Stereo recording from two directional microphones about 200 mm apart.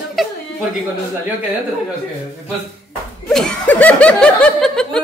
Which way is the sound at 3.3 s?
5° left (ahead or behind).